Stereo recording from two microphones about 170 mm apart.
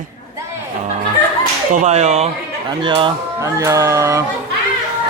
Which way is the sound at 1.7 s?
40° right (ahead or behind).